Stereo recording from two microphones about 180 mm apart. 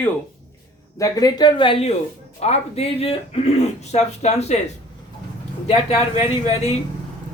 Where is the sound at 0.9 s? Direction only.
20° left (ahead or behind); by 4.5 s 40° left (ahead or behind).